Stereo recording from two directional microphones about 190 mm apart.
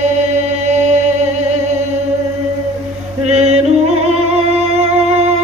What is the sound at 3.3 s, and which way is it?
Music, 35° right (ahead or behind).